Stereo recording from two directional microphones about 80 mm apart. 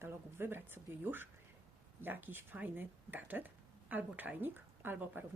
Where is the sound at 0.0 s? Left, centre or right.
Right.